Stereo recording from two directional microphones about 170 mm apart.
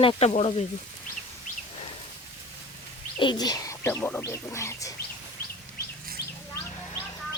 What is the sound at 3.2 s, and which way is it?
Speech, 25° left (ahead or behind).